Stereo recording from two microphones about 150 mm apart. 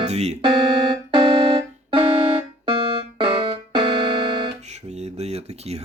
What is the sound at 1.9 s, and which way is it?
Music, 35° right (ahead or behind).